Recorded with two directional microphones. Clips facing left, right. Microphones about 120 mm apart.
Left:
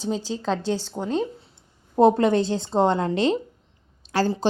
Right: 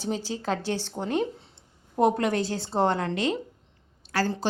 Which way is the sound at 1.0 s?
5° left (ahead or behind).